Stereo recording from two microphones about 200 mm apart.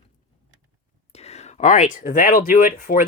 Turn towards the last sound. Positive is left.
turn(degrees=40)  # may be behind; listen again after turning